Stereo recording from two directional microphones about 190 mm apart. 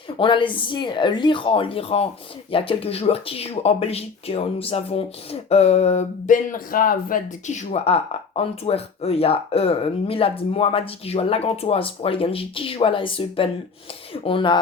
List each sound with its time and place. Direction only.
0.2 s speech: 25° left (ahead or behind)